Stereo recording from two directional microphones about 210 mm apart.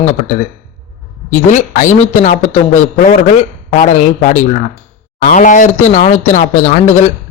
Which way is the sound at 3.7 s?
35° left (ahead or behind).